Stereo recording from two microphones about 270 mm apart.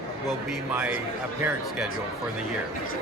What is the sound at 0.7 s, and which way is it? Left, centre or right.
Speech, centre.